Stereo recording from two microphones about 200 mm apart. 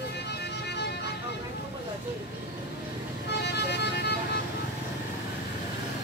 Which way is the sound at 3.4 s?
55° left (ahead or behind).